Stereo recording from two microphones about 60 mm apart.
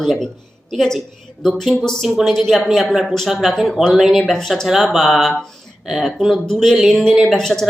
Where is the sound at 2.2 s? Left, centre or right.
Centre.